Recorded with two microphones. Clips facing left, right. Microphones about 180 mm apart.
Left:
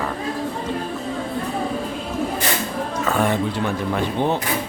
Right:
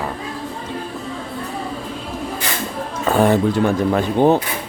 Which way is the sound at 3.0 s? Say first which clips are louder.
Right 6 dB; 35° right (ahead or behind).